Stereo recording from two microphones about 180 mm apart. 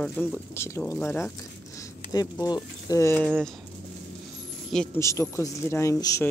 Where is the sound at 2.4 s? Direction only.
20° left (ahead or behind).